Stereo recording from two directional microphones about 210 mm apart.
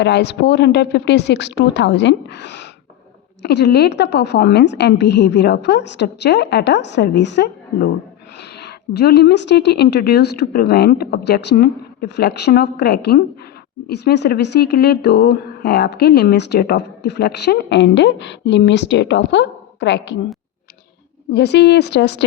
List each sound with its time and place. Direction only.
0.0 s a woman's voice: 55° left (ahead or behind)
21.3 s speech: 50° left (ahead or behind)